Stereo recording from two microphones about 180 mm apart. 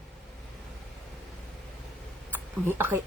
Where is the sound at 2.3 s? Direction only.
10° right (ahead or behind).